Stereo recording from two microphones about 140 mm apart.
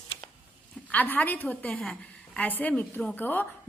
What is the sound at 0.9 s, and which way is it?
A woman's voice, 10° left (ahead or behind).